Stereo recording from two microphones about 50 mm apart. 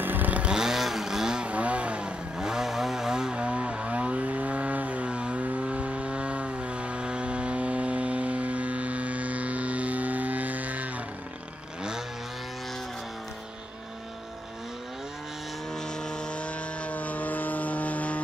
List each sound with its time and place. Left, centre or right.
0.0 s vehicle: right
0.5 s vehicle: centre
1.5 s vehicle: right
2.3 s vehicle: centre; by 10.9 s right
15.7 s aircraft: centre; by 18.2 s left